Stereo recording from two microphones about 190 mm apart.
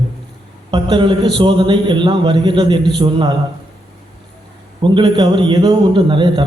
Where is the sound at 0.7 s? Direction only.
25° right (ahead or behind).